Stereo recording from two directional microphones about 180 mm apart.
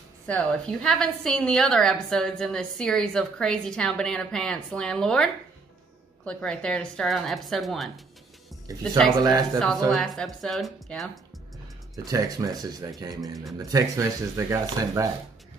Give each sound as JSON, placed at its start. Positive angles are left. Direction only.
{"t": 0.3, "sound": "a woman's voice", "side_deg": 5}
{"t": 9.2, "sound": "speech", "side_deg": -20}
{"t": 9.8, "sound": "a woman's voice", "side_deg": 0}
{"t": 11.9, "sound": "speech", "side_deg": -20}